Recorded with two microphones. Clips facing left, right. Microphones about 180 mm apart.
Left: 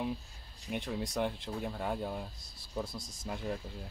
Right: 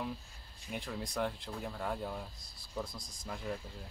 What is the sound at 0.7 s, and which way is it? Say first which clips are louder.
Speech: left 4 dB; 5° left (ahead or behind).